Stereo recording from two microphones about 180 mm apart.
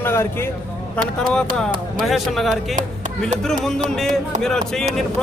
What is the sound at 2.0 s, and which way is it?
Speech, centre (ahead or behind).